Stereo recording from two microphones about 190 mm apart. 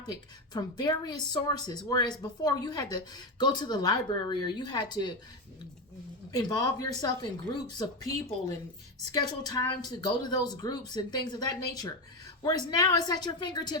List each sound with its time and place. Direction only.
0.5 s a woman's voice: 20° left (ahead or behind)
6.3 s a woman's voice: 20° left (ahead or behind)